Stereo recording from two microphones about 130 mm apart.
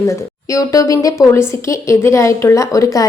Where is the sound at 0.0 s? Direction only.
25° left (ahead or behind).